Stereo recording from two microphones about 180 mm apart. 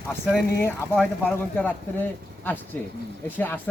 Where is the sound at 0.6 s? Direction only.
10° left (ahead or behind).